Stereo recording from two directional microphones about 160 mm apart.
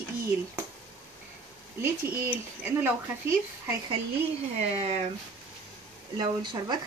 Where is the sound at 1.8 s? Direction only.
10° right (ahead or behind).